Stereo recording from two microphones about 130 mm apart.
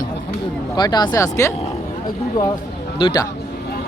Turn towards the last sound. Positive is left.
turn(degrees=35)  # may be behind; listen again after turning